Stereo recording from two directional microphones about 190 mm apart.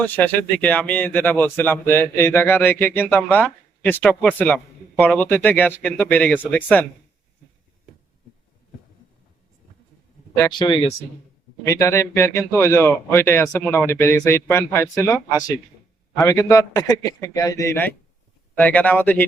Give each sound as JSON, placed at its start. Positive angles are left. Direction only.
{"t": 0.0, "sound": "a man's voice", "side_deg": 10}
{"t": 10.3, "sound": "a man's voice", "side_deg": 20}